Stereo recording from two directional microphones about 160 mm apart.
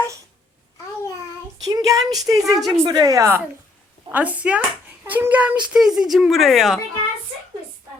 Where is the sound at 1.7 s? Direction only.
20° right (ahead or behind).